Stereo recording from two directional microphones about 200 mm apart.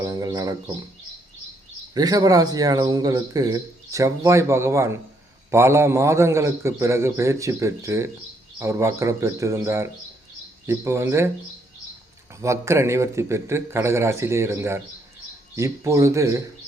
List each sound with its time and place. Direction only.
0.0 s speech: 15° right (ahead or behind)
1.9 s speech: 20° right (ahead or behind)
12.4 s speech: 15° right (ahead or behind)